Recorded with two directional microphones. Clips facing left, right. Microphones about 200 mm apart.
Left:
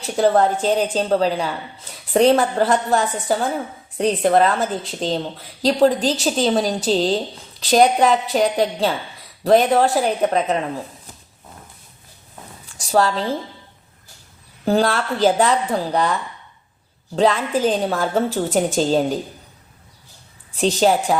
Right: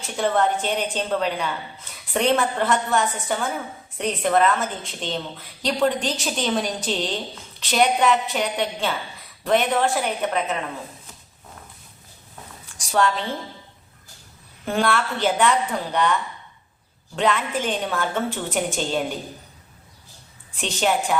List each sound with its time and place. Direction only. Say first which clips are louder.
0.0 s a woman's voice: left 5 dB; 35° left (ahead or behind)
12.9 s a woman's voice: left 4 dB; 35° left (ahead or behind)
14.6 s a woman's voice: left 4 dB; 35° left (ahead or behind)
17.2 s a woman's voice: left 5 dB; 35° left (ahead or behind)
20.5 s a woman's voice: left 6 dB; 35° left (ahead or behind)